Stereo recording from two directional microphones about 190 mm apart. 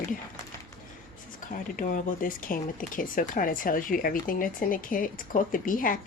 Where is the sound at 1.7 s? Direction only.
45° left (ahead or behind).